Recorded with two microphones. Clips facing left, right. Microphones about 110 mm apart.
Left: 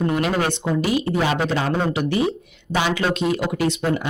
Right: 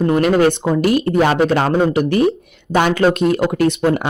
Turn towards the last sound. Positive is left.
turn(degrees=-60)  # may be behind; listen again after turning